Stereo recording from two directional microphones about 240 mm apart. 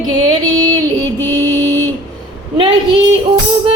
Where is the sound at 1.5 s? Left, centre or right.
Centre.